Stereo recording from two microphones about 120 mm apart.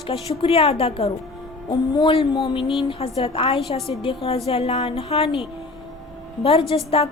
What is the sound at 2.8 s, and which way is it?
A woman's voice, 50° left (ahead or behind).